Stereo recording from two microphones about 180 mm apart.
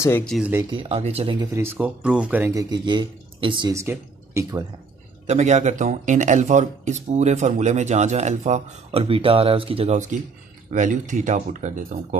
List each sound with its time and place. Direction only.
0.2 s speech: centre (ahead or behind)
0.7 s speech: 30° right (ahead or behind)
1.5 s speech: 15° right (ahead or behind)
2.7 s speech: 25° right (ahead or behind)
5.2 s speech: 40° right (ahead or behind)